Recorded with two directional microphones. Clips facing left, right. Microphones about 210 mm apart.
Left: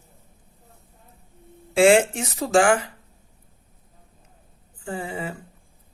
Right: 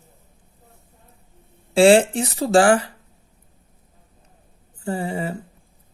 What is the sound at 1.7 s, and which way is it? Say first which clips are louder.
Speech: right 3 dB; 30° right (ahead or behind).